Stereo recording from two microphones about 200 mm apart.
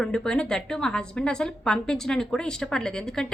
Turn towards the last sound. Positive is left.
turn(degrees=5)  # may be behind; listen again after turning